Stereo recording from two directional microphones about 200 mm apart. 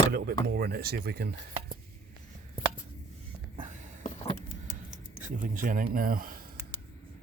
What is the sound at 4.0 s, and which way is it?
Vehicle, 30° left (ahead or behind).